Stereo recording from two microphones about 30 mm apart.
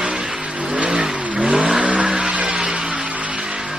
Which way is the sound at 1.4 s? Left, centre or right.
Right.